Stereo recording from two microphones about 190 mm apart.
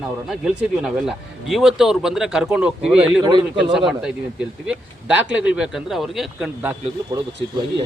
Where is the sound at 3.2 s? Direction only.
25° right (ahead or behind).